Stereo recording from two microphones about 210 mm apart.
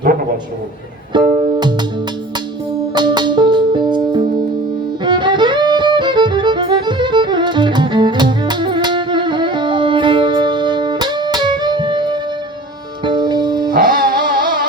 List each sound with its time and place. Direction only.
1.1 s music: 20° right (ahead or behind)
2.9 s music: 20° right (ahead or behind)
5.0 s violin: 20° right (ahead or behind)
13.1 s music: 20° right (ahead or behind)
13.7 s music: 45° right (ahead or behind)